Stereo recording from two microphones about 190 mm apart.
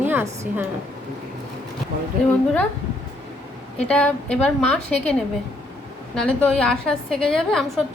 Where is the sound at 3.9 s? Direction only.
5° left (ahead or behind).